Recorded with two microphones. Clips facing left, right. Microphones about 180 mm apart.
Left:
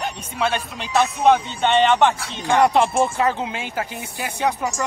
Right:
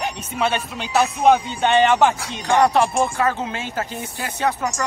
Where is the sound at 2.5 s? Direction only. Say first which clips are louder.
Even; 20° left (ahead or behind).